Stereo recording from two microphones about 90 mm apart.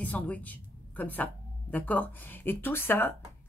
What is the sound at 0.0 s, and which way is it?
A woman's voice, 15° left (ahead or behind).